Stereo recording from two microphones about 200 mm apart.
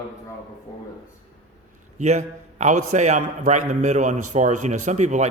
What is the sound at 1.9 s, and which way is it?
A man's voice, 35° right (ahead or behind).